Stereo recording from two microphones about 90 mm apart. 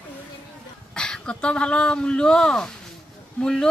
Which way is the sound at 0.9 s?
10° left (ahead or behind).